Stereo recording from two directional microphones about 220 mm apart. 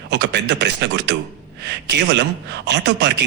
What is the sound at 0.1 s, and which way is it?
Speech, 50° right (ahead or behind).